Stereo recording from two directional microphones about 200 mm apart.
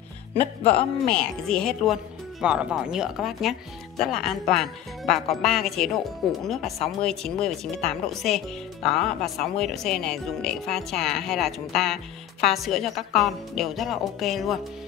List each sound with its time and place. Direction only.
0.4 s speech: 30° left (ahead or behind)
1.0 s speech: 5° left (ahead or behind)